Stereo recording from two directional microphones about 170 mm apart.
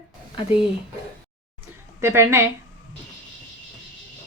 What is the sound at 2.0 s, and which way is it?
Speech, 15° right (ahead or behind).